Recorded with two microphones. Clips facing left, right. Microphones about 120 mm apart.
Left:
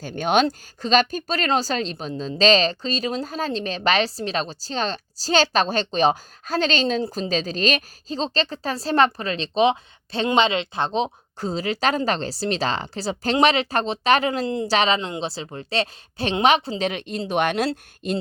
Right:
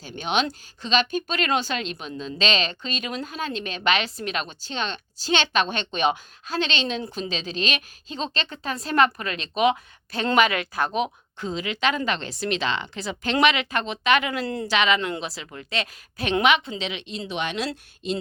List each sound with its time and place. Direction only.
0.0 s speech: 45° left (ahead or behind)
14.4 s a woman's voice: 20° left (ahead or behind)
14.7 s speech: 35° left (ahead or behind); by 18.2 s 50° left (ahead or behind)